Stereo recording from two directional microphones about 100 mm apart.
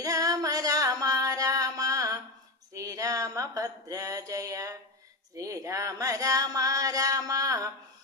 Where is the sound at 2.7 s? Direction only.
35° right (ahead or behind).